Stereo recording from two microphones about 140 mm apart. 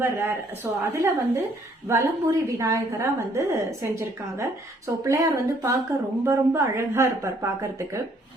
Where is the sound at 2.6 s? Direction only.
20° right (ahead or behind).